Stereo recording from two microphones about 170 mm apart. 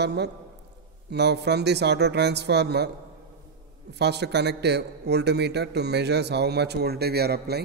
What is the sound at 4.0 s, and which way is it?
Speech, 80° right.